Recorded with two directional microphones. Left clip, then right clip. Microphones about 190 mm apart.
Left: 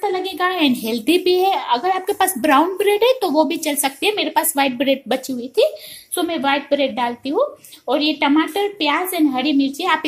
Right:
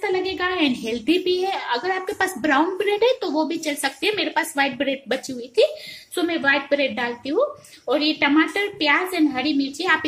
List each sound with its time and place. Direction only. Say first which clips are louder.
0.0 s a woman's voice: left 3 dB; 25° left (ahead or behind)